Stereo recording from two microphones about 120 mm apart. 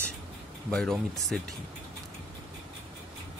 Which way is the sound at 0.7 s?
5° left (ahead or behind).